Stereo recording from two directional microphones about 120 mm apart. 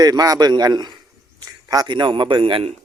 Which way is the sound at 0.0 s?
30° right (ahead or behind).